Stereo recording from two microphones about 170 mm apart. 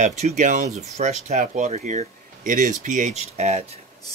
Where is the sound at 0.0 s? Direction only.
45° right (ahead or behind).